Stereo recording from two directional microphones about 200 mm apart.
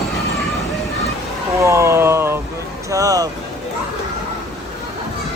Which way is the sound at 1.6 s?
15° right (ahead or behind).